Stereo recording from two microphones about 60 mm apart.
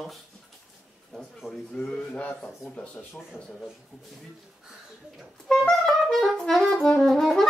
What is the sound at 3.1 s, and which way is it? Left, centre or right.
Speech, centre.